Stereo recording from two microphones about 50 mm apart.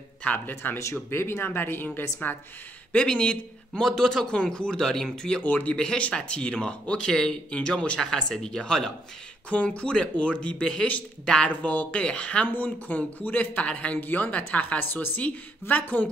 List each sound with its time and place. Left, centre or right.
0.5 s speech: left
0.9 s speech: left
2.9 s speech: left
5.4 s speech: left
7.1 s speech: centre
7.5 s speech: centre
9.5 s speech: left
12.4 s speech: left
13.9 s speech: left
14.8 s speech: left